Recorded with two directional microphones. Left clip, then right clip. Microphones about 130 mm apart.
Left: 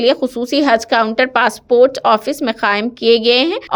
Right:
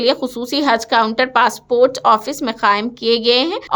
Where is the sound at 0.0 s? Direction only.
15° left (ahead or behind).